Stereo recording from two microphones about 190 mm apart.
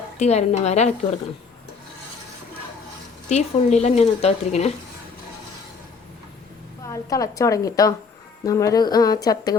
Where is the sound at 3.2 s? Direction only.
35° left (ahead or behind).